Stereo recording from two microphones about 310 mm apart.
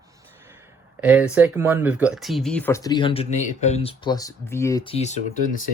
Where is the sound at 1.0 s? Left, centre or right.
Centre.